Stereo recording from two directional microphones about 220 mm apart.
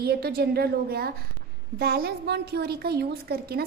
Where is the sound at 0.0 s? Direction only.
45° right (ahead or behind).